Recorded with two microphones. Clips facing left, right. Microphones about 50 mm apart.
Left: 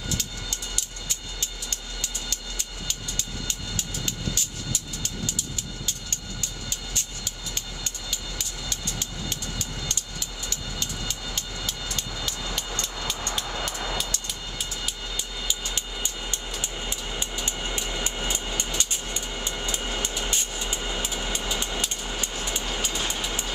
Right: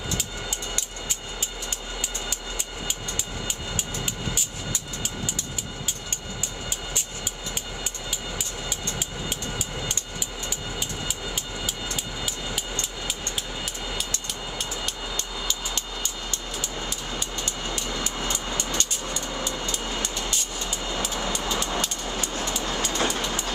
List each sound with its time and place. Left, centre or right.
1.7 s train: centre
11.3 s train: centre
13.4 s vehicle: centre
14.6 s train: centre
15.7 s train: left
17.5 s train: left
21.5 s vehicle: right
22.8 s train: right